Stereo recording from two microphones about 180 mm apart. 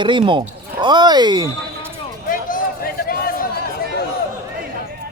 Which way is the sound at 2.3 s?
50° left (ahead or behind).